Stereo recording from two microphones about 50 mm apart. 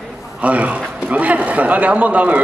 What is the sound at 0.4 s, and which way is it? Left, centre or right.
A man's voice, right.